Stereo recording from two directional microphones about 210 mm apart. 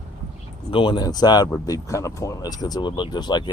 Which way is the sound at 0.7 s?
25° left (ahead or behind).